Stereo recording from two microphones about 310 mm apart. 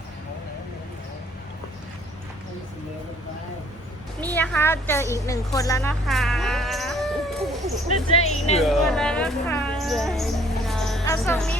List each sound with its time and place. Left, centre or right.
4.2 s a woman's voice: centre
8.1 s speech: centre
8.6 s speech: centre